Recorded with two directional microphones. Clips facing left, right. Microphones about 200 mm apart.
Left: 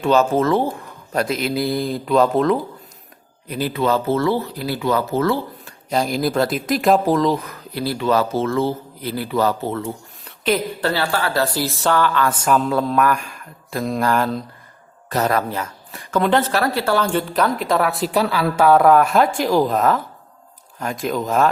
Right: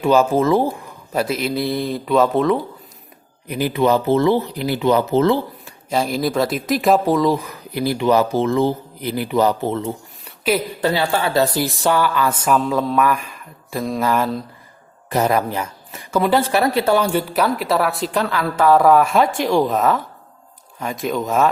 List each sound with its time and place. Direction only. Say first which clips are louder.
0.0 s a woman's voice: right 1 dB; 10° right (ahead or behind)
3.5 s speech: right 3 dB; 15° right (ahead or behind)
5.9 s speech: even; centre (ahead or behind); by 9.9 s 20° right (ahead or behind)
10.2 s a sound: right 1 dB; 5° right (ahead or behind)
10.8 s a woman's voice: right 2 dB; 15° right (ahead or behind); by 14.4 s centre (ahead or behind)
15.1 s a woman's voice: right 2 dB; 15° right (ahead or behind)